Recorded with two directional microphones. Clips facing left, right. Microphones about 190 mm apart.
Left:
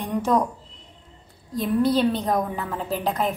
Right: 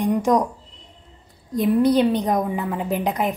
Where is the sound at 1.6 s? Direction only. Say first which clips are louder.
Right 4 dB; 15° right (ahead or behind).